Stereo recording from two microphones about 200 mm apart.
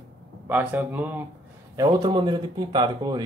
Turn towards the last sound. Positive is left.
turn(degrees=-20)  # may be behind; listen again after turning